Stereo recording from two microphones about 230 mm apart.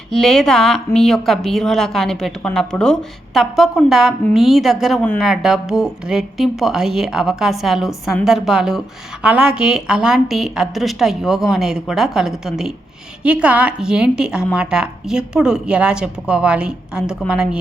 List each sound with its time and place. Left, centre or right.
0.1 s a woman's voice: centre